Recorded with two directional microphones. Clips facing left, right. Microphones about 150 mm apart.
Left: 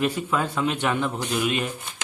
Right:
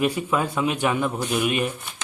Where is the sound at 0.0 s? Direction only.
10° right (ahead or behind).